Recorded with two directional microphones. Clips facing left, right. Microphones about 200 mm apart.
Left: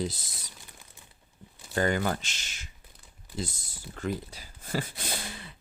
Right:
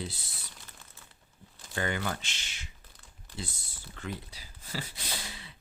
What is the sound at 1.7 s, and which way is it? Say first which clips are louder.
Speech: left 6 dB; 40° left (ahead or behind).